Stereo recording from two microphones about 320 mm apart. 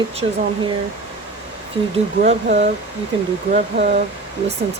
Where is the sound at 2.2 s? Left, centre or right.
Right.